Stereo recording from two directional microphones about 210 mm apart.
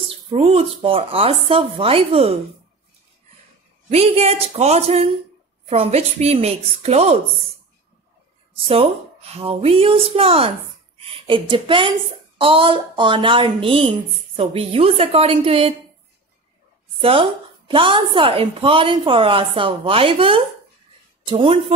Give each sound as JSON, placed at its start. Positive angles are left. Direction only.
{"t": 0.3, "sound": "a woman's voice", "side_deg": -30}
{"t": 3.9, "sound": "a woman's voice", "side_deg": -30}
{"t": 8.5, "sound": "a woman's voice", "side_deg": -30}
{"t": 17.0, "sound": "a woman's voice", "side_deg": -25}